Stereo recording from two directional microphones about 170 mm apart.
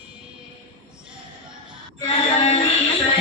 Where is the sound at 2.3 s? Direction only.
35° left (ahead or behind).